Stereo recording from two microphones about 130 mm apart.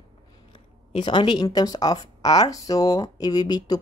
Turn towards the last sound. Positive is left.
turn(degrees=30)  # may be behind; listen again after turning